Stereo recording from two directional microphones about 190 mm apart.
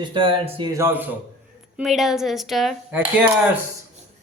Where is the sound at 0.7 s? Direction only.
15° right (ahead or behind).